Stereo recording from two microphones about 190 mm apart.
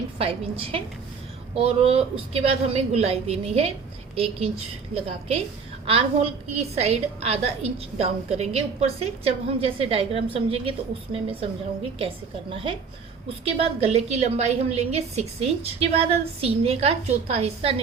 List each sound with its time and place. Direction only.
0.2 s a woman's voice: 30° right (ahead or behind)